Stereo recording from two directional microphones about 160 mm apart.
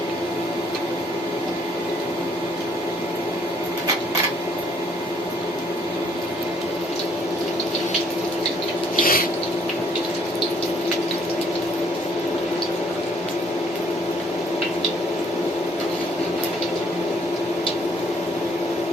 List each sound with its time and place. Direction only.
9.0 s sink: 65° left (ahead or behind)